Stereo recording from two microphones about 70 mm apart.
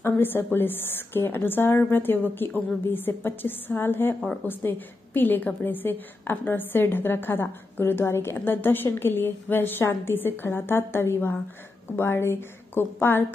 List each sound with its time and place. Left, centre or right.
0.0 s a woman's voice: left